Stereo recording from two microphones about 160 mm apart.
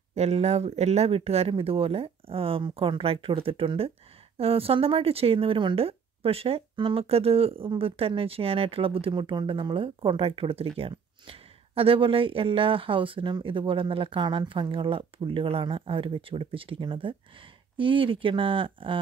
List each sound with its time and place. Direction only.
0.1 s speech: 40° right (ahead or behind)